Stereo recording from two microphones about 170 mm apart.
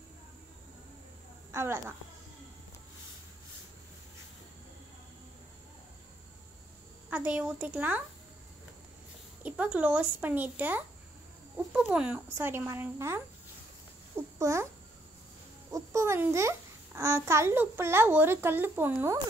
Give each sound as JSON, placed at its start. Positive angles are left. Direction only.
{"t": 1.5, "sound": "a woman's voice", "side_deg": -15}
{"t": 7.1, "sound": "a child's voice", "side_deg": -10}
{"t": 9.4, "sound": "a child's voice", "side_deg": -10}
{"t": 15.7, "sound": "a child's voice", "side_deg": -15}